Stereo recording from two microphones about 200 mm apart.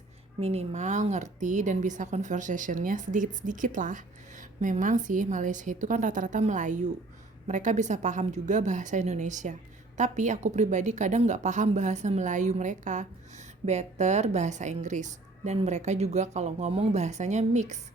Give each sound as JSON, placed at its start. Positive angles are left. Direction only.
{"t": 0.3, "sound": "a woman's voice", "side_deg": -30}